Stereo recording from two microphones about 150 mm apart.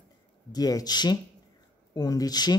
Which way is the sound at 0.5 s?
25° left (ahead or behind).